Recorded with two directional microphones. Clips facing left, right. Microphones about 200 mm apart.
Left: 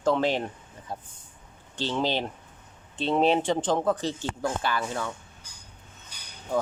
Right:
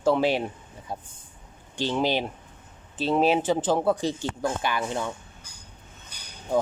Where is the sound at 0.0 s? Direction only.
10° right (ahead or behind).